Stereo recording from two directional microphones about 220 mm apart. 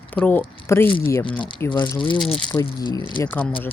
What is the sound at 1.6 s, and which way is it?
Speech, 20° left (ahead or behind).